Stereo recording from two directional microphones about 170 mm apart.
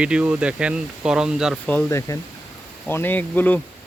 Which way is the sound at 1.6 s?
15° left (ahead or behind).